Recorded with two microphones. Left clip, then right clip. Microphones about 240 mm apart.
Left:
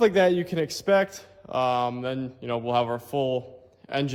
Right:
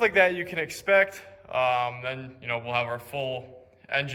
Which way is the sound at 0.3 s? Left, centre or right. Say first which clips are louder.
Left 3 dB; left.